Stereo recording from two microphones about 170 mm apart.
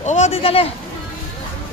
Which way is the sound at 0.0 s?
45° left (ahead or behind).